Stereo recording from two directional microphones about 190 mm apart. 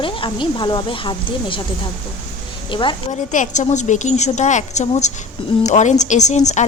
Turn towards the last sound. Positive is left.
turn(degrees=40)  # may be behind; listen again after turning